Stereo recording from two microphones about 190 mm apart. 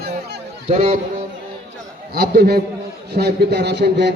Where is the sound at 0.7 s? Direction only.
30° right (ahead or behind).